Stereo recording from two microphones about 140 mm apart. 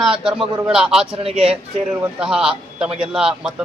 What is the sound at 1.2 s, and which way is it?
Speech, 45° right (ahead or behind).